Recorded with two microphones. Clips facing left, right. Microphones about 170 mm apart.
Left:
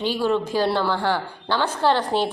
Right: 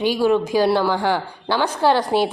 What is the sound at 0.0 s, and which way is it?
A woman's voice, 10° right (ahead or behind).